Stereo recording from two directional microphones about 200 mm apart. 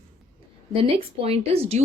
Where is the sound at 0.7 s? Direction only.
30° right (ahead or behind).